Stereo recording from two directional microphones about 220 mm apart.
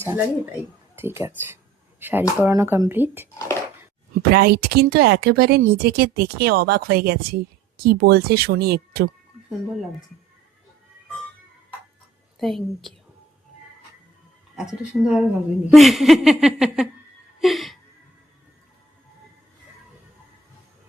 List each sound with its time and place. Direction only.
0.9 s speech: 10° right (ahead or behind)
4.1 s speech: 45° right (ahead or behind)
12.4 s a woman's voice: centre (ahead or behind)
14.5 s a woman's voice: 5° right (ahead or behind)
17.4 s a sound: centre (ahead or behind)